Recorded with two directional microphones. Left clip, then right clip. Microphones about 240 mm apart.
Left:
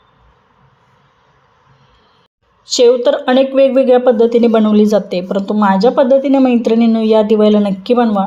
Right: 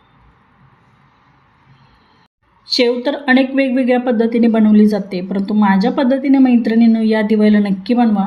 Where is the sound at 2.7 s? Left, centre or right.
Left.